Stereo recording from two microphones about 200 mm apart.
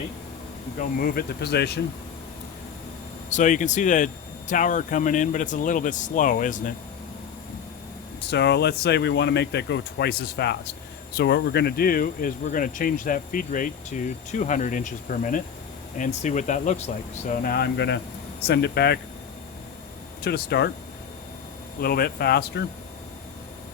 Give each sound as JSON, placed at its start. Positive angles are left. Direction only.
{"t": 0.8, "sound": "speech", "side_deg": 45}
{"t": 3.2, "sound": "speech", "side_deg": 40}
{"t": 8.3, "sound": "speech", "side_deg": 55}
{"t": 20.2, "sound": "speech", "side_deg": 55}
{"t": 21.8, "sound": "speech", "side_deg": 50}